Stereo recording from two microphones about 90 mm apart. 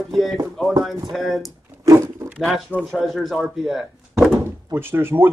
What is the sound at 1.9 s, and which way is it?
Roaring cats, 30° right (ahead or behind).